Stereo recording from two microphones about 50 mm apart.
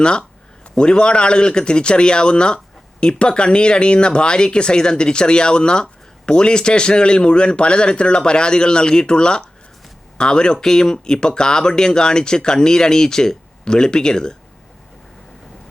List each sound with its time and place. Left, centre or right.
0.0 s speech: centre